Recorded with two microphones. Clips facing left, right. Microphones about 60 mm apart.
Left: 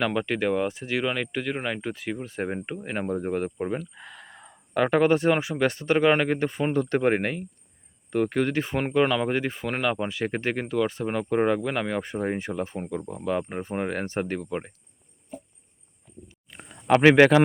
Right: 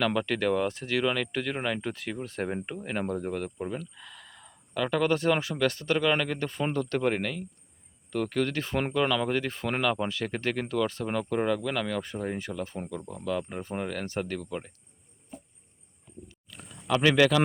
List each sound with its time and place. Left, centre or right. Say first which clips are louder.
0.0 s speech: left 2 dB; centre
16.5 s a sound: left 2 dB; left
17.1 s speech: left 6 dB; left